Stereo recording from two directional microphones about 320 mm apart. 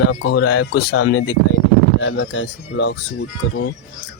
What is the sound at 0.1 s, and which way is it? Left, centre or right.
Speech, left.